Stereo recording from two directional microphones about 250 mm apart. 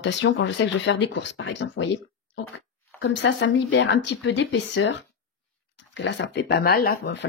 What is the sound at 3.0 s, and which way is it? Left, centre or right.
Speech, left.